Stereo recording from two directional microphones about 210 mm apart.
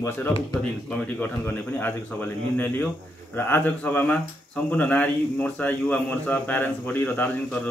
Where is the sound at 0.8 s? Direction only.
10° left (ahead or behind).